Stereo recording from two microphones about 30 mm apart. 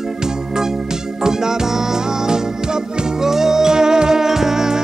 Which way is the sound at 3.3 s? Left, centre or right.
Centre.